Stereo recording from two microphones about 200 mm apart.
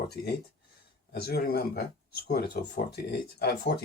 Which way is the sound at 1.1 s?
50° left (ahead or behind).